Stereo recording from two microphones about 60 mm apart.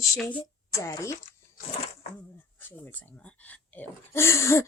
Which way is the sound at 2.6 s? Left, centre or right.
Left.